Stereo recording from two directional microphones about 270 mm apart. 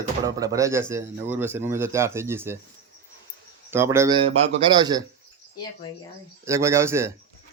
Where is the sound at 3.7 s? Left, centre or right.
Centre.